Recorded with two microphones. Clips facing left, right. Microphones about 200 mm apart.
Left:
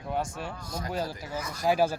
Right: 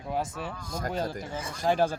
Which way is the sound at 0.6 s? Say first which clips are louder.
Right 2 dB; 50° right (ahead or behind).